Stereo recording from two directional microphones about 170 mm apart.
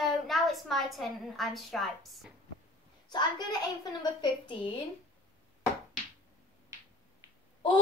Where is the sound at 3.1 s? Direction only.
25° left (ahead or behind).